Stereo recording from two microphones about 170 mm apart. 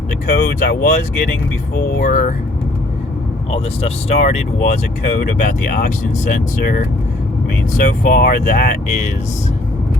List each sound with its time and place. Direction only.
0.3 s speech: 50° left (ahead or behind)
3.5 s speech: 35° left (ahead or behind)